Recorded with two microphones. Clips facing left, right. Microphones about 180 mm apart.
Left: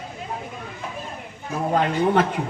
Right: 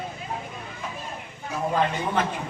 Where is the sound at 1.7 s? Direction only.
60° left (ahead or behind).